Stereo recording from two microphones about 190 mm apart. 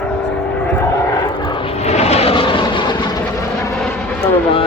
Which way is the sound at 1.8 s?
35° left (ahead or behind).